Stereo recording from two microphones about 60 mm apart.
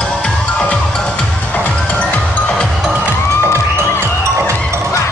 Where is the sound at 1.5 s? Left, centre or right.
Left.